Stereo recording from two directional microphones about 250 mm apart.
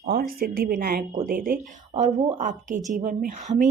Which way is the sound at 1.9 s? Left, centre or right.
Right.